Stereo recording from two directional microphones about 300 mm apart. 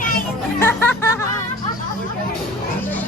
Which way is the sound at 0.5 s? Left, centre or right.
Centre.